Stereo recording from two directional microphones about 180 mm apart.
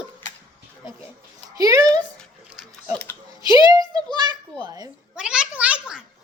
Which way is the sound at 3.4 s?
20° right (ahead or behind).